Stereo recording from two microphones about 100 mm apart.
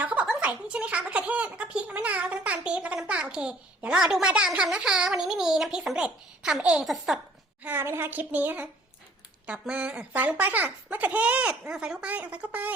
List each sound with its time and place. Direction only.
0.0 s a sound: 15° right (ahead or behind)
0.3 s a child's voice: 10° right (ahead or behind)
7.6 s a child's voice: 20° right (ahead or behind)